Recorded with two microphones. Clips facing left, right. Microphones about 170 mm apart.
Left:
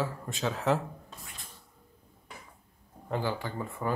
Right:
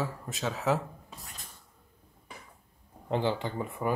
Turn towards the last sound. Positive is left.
turn(degrees=-15)  # may be behind; listen again after turning